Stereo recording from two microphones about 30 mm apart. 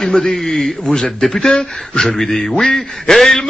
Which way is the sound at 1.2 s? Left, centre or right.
Centre.